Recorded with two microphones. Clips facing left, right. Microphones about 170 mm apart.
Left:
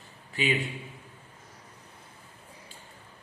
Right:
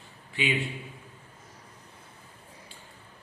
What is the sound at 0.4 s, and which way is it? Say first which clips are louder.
Speech: left 1 dB; 40° left (ahead or behind).